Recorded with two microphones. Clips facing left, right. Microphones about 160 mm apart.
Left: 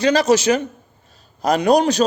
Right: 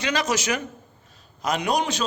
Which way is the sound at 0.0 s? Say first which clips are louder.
Left 10 dB; 35° left (ahead or behind).